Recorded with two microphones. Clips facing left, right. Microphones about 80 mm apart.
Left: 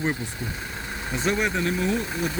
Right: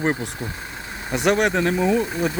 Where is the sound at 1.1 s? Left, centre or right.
Right.